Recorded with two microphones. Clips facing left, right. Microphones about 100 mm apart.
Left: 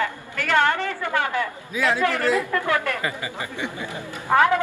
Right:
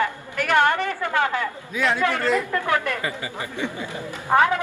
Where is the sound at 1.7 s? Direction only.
5° left (ahead or behind).